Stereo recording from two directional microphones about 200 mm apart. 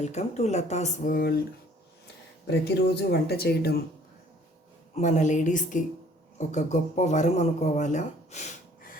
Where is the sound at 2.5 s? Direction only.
55° left (ahead or behind).